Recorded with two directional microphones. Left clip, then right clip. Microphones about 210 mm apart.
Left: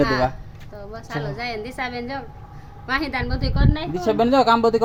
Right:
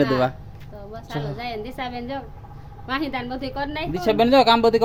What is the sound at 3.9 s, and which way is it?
Speech, 5° left (ahead or behind).